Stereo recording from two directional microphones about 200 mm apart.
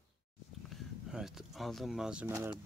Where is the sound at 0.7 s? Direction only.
Centre (ahead or behind).